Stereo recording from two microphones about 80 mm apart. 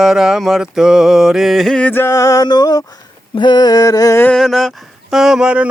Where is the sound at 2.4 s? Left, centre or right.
Left.